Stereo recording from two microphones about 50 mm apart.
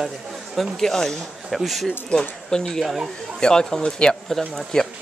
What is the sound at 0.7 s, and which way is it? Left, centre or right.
Speech, centre.